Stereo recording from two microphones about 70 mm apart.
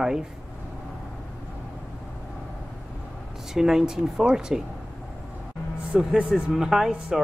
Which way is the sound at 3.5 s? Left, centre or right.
Centre.